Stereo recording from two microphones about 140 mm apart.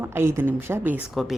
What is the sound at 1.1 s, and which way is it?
Speech, centre (ahead or behind).